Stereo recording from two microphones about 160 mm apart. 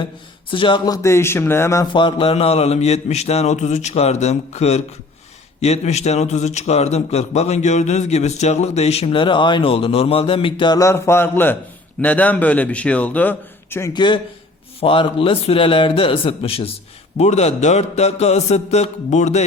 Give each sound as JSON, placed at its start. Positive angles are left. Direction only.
{"t": 0.5, "sound": "speech", "side_deg": 30}
{"t": 1.0, "sound": "a man's voice", "side_deg": 15}
{"t": 13.9, "sound": "a man's voice", "side_deg": 30}